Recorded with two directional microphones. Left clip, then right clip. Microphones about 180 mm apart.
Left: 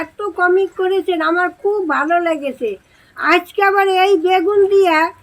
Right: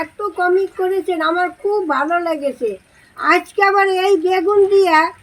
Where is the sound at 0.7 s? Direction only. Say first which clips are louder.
Left 2 dB; 25° left (ahead or behind).